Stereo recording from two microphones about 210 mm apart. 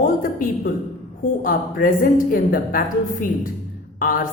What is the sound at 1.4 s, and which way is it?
A woman's voice, 40° left (ahead or behind).